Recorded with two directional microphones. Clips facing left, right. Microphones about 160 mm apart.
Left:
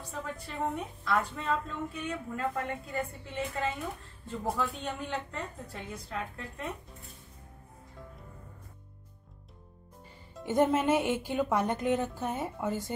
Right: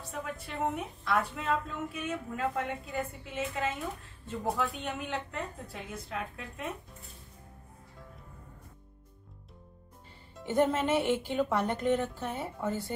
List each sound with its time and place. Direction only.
0.1 s a woman's voice: 10° right (ahead or behind)
10.4 s speech: 10° left (ahead or behind)